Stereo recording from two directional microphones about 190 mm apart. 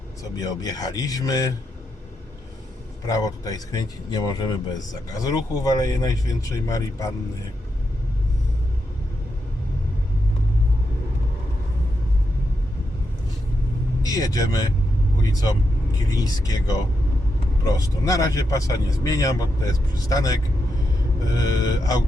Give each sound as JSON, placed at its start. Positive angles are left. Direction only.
{"t": 0.2, "sound": "speech", "side_deg": 20}
{"t": 3.1, "sound": "speech", "side_deg": 20}
{"t": 14.1, "sound": "speech", "side_deg": 20}